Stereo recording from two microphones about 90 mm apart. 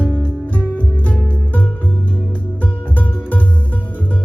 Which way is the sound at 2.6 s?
15° left (ahead or behind).